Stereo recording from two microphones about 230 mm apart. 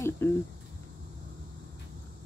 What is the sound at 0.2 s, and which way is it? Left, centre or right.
Speech, centre.